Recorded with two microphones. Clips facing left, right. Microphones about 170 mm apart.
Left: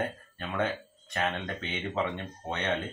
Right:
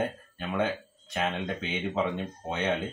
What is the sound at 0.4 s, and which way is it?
Speech, 5° right (ahead or behind).